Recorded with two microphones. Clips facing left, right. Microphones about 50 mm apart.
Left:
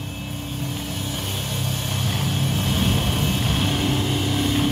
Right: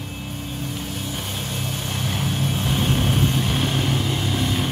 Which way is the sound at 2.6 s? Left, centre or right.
Centre.